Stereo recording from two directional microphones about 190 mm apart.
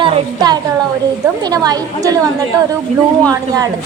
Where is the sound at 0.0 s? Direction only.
25° right (ahead or behind).